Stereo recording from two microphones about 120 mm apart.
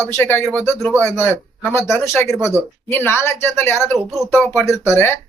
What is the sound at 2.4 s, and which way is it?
Speech, 20° left (ahead or behind).